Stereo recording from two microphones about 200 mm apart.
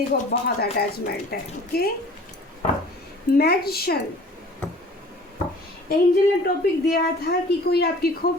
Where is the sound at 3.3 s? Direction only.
50° left (ahead or behind).